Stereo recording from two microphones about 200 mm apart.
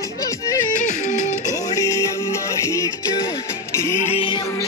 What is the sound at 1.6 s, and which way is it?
Music, 15° left (ahead or behind).